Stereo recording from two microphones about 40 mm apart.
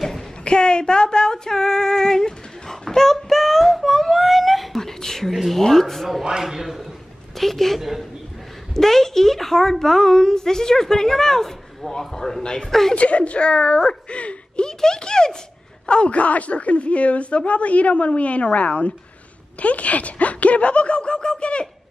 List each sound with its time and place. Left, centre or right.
0.5 s female singing: left
5.3 s speech: centre
5.6 s a woman's voice: centre
6.2 s a man's voice: centre
7.3 s a woman's voice: centre
12.9 s a woman's voice: left
14.1 s a sound: left
14.7 s a sound: centre
15.9 s speech: left